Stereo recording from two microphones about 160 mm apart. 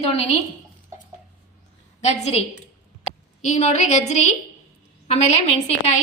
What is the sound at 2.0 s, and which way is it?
Speech, 45° left (ahead or behind).